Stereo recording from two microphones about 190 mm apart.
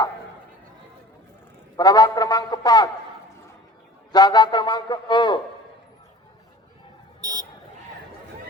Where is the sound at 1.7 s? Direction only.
20° left (ahead or behind).